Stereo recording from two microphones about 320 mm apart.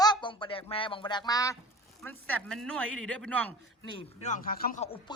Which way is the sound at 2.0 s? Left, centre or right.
Centre.